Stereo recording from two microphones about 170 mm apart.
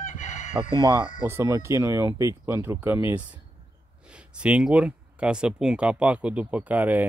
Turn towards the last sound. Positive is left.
turn(degrees=-10)  # may be behind; listen again after turning